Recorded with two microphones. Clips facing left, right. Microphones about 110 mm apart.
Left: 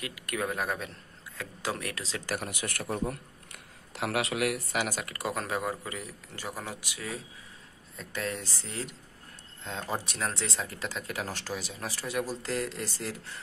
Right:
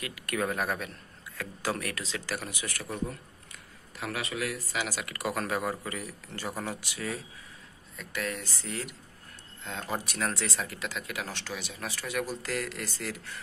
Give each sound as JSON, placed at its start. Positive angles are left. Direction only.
{"t": 0.0, "sound": "speech", "side_deg": 15}
{"t": 2.5, "sound": "a man's voice", "side_deg": 60}
{"t": 3.1, "sound": "speech", "side_deg": 70}
{"t": 4.8, "sound": "speech", "side_deg": 45}
{"t": 5.3, "sound": "speech", "side_deg": 20}
{"t": 7.9, "sound": "speech", "side_deg": 30}
{"t": 10.0, "sound": "speech", "side_deg": 25}